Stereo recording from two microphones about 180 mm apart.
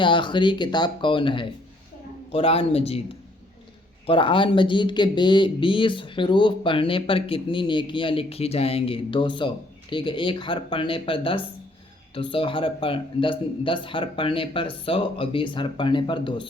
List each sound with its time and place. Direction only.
0.0 s speech: 25° left (ahead or behind)
4.0 s speech: 30° left (ahead or behind)